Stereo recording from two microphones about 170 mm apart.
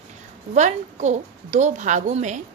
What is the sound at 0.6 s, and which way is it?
A woman's voice, 45° right (ahead or behind).